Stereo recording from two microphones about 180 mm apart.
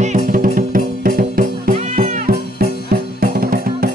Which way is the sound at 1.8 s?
40° right (ahead or behind).